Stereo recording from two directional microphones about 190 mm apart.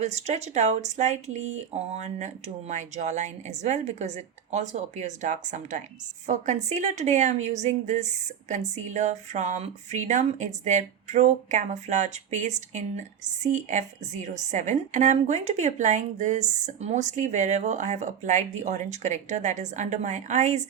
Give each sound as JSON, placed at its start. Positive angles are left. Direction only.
{"t": 0.0, "sound": "a woman's voice", "side_deg": -35}